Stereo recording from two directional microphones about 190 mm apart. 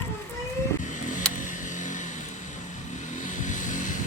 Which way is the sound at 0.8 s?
40° left (ahead or behind).